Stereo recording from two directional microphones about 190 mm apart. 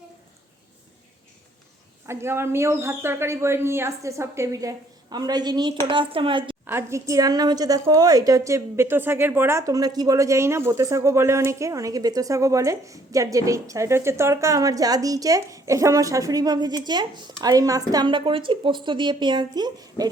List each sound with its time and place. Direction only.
2.0 s a woman's voice: 15° right (ahead or behind)
6.7 s a woman's voice: 15° right (ahead or behind)